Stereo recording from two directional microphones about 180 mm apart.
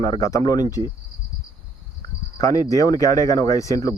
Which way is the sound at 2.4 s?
20° left (ahead or behind).